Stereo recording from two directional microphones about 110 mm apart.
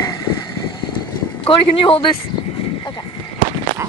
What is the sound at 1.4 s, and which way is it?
Speech, 55° left (ahead or behind).